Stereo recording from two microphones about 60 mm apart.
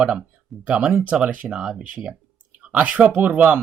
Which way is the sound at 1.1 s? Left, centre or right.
Right.